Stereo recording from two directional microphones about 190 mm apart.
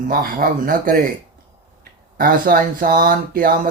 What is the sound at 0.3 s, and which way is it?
Speech, 45° right (ahead or behind).